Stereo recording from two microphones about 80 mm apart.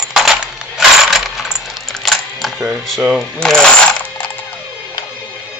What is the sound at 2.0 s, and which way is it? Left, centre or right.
Music, centre.